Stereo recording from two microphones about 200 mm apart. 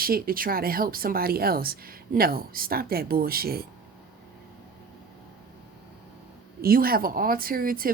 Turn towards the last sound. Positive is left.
turn(degrees=-45)  # may be behind; listen again after turning